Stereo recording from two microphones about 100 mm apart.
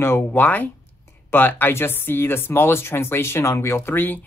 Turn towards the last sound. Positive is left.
turn(degrees=20)  # may be behind; listen again after turning